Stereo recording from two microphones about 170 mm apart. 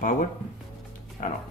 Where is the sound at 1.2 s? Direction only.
50° left (ahead or behind).